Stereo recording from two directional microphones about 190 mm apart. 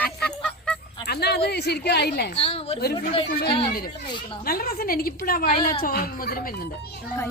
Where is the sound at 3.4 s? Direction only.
50° left (ahead or behind).